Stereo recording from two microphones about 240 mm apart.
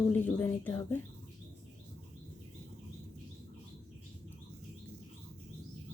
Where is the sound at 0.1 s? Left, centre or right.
Centre.